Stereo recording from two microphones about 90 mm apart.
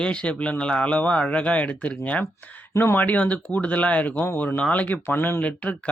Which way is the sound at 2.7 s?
25° left (ahead or behind).